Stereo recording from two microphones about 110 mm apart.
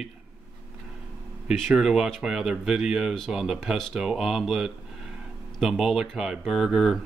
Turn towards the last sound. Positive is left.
turn(degrees=0)  # may be behind; listen again after turning